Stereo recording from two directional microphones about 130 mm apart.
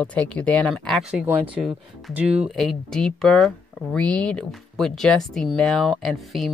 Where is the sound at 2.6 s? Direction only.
5° left (ahead or behind).